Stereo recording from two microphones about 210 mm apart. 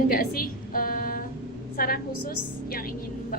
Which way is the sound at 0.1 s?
45° left (ahead or behind).